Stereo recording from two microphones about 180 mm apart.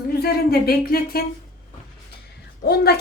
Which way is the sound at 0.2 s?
60° left (ahead or behind).